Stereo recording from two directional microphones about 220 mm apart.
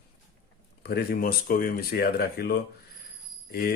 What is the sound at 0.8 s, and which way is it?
Speech, 45° left (ahead or behind).